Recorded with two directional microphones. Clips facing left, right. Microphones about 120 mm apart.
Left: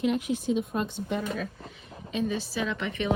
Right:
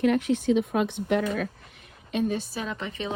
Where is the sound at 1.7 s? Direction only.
55° right (ahead or behind).